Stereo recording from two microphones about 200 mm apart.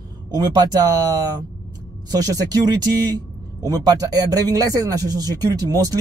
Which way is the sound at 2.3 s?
20° right (ahead or behind).